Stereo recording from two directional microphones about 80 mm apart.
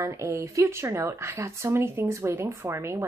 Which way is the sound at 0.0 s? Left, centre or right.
Right.